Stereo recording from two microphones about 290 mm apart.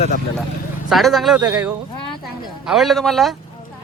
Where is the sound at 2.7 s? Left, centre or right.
Centre.